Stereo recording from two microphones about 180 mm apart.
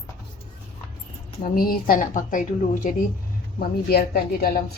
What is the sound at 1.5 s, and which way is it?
A woman's voice, 50° left (ahead or behind).